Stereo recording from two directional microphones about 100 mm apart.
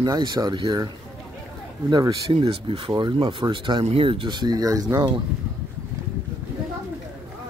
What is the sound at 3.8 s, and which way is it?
Speech, 65° right (ahead or behind).